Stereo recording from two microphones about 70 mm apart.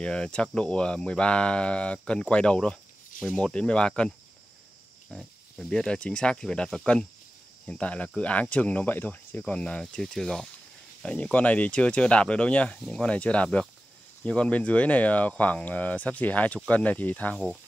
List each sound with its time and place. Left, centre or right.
0.0 s speech: centre
5.1 s speech: centre; by 9.4 s left
9.5 s speech: centre